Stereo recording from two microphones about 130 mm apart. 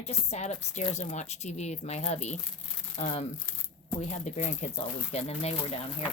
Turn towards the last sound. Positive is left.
turn(degrees=50)  # may be behind; listen again after turning